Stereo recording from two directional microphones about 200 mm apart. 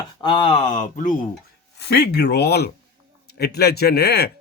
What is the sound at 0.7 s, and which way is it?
Speech, 40° left (ahead or behind).